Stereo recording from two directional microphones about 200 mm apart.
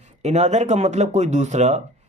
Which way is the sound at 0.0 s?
35° right (ahead or behind).